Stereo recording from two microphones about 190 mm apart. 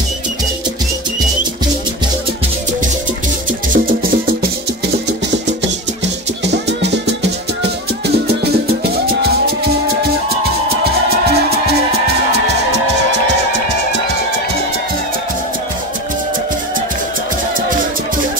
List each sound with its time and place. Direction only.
3.7 s music: 50° right (ahead or behind)
6.4 s music: 65° right (ahead or behind)
12.3 s music: 65° right (ahead or behind)